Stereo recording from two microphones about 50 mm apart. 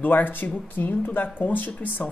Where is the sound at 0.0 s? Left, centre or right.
Left.